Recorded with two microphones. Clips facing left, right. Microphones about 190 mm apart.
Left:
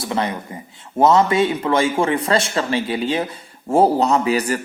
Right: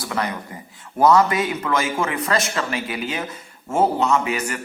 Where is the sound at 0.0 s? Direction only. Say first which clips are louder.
Left 3 dB; 25° left (ahead or behind).